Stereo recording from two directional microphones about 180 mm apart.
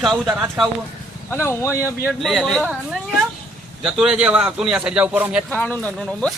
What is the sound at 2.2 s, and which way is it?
Speech, centre (ahead or behind).